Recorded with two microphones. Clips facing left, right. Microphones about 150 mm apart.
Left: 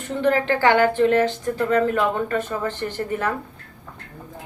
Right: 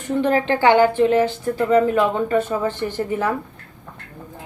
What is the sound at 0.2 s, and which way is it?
Speech, 20° right (ahead or behind).